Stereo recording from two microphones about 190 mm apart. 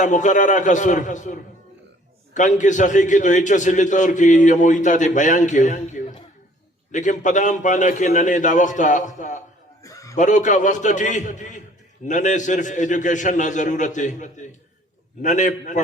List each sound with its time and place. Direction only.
0.0 s a man's voice: 40° left (ahead or behind)
9.8 s chuckle: 15° left (ahead or behind)
10.2 s a man's voice: 40° left (ahead or behind)